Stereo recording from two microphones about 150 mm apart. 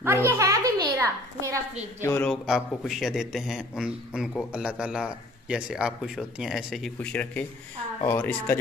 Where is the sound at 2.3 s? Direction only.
Centre (ahead or behind).